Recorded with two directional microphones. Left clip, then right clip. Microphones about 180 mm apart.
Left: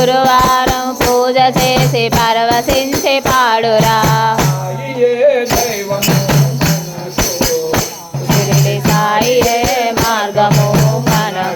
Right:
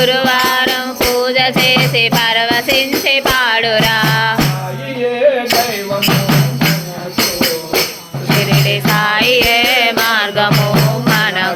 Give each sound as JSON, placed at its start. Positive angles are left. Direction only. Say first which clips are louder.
{"t": 0.0, "sound": "music", "louder": "left 2 dB", "side_deg": 30}
{"t": 8.6, "sound": "music", "louder": "right 1 dB", "side_deg": 25}